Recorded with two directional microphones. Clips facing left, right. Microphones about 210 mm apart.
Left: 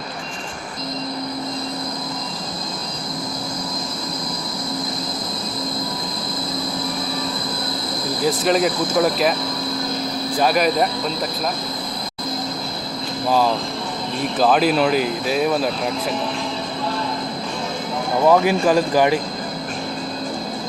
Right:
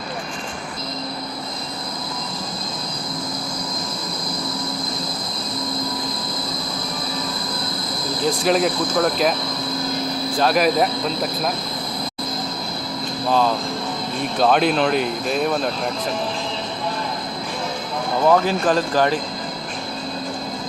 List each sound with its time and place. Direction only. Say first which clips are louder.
8.2 s speech: even; centre (ahead or behind)
10.4 s speech: even; centre (ahead or behind)
14.3 s speech: left 1 dB; 5° left (ahead or behind)
18.3 s speech: left 2 dB; 10° left (ahead or behind)